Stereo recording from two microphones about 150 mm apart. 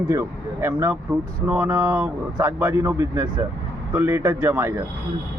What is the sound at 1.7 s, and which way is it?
A man's voice, 20° right (ahead or behind).